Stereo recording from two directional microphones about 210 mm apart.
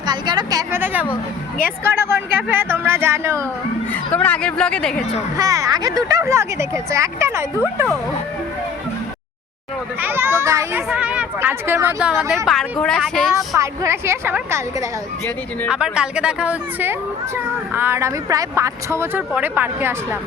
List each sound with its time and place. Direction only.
0.0 s a woman's voice: 20° right (ahead or behind)
3.9 s speech: 5° left (ahead or behind)
5.4 s speech: 15° right (ahead or behind)
10.0 s speech: 10° right (ahead or behind)
13.6 s speech: 15° right (ahead or behind)